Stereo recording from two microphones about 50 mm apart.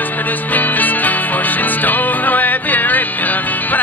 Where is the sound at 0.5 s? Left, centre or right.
Left.